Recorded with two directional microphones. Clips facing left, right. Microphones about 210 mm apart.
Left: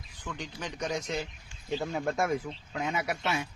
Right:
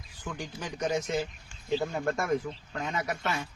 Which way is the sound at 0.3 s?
5° right (ahead or behind).